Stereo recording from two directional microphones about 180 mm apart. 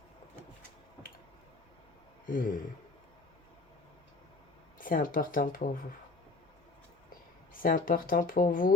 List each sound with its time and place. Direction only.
2.2 s speech: 50° left (ahead or behind)
4.8 s speech: 50° left (ahead or behind)
7.5 s speech: 50° left (ahead or behind)